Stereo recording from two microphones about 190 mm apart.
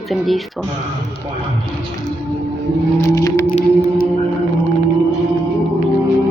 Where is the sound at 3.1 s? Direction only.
15° left (ahead or behind).